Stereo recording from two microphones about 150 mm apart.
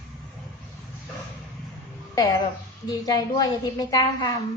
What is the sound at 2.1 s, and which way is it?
A woman's voice, 25° left (ahead or behind).